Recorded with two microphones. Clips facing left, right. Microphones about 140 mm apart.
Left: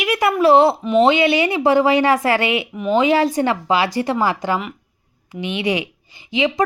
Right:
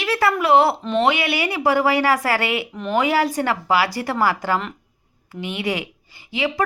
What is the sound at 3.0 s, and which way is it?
A woman's voice, 20° left (ahead or behind).